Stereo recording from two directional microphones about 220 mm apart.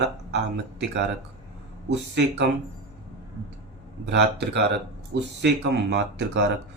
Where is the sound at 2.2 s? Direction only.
55° right (ahead or behind).